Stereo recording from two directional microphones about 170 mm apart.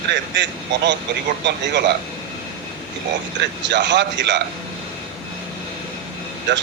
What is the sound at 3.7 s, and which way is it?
Speech, 90° right.